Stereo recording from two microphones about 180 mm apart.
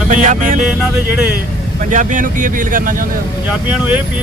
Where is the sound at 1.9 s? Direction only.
45° right (ahead or behind).